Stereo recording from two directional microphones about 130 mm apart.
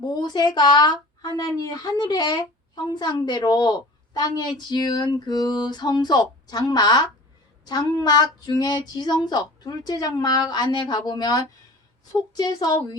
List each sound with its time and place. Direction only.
0.0 s speech: 35° left (ahead or behind)